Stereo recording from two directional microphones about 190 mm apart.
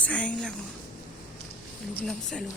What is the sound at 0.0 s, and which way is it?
Speech, 5° left (ahead or behind).